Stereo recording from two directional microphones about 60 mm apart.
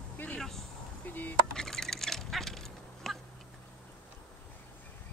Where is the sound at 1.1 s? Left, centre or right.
Left.